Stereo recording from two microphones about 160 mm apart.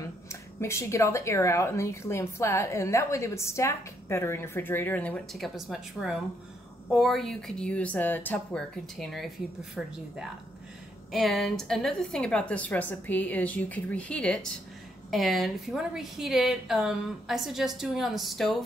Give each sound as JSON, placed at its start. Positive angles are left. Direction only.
{"t": 0.3, "sound": "a woman's voice", "side_deg": 15}
{"t": 11.1, "sound": "a woman's voice", "side_deg": 0}